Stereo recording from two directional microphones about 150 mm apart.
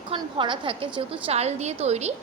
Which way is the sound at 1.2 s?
45° right (ahead or behind).